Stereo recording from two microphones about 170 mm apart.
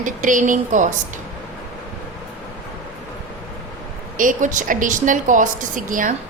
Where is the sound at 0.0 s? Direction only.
50° right (ahead or behind).